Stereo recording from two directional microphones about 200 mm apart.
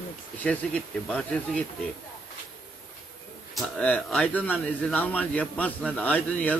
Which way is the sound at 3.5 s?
5° left (ahead or behind).